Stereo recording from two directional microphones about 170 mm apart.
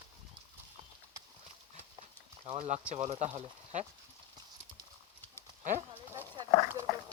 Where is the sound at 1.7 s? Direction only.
35° right (ahead or behind).